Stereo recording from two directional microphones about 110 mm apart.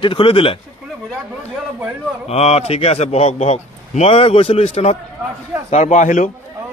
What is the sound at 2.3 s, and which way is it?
A man's voice, 70° left (ahead or behind).